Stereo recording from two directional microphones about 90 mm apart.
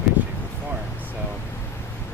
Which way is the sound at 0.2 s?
20° right (ahead or behind).